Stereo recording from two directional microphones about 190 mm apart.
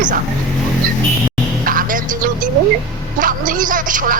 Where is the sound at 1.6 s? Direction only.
45° right (ahead or behind).